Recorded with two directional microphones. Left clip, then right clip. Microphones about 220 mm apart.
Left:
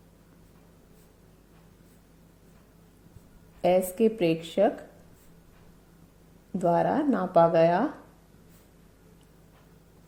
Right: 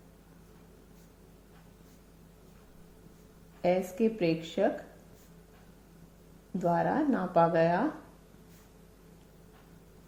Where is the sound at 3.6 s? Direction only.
40° left (ahead or behind).